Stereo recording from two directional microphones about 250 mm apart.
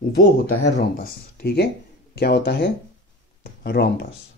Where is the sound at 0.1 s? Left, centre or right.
Left.